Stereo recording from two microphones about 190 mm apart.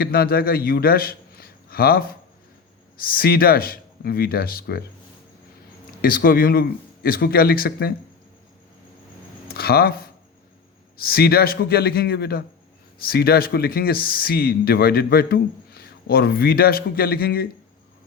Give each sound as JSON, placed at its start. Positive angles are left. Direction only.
{"t": 0.0, "sound": "a man's voice", "side_deg": 50}
{"t": 6.0, "sound": "speech", "side_deg": 50}
{"t": 9.6, "sound": "speech", "side_deg": 55}